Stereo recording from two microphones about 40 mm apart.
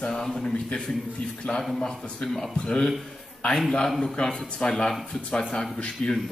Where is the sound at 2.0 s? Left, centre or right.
Centre.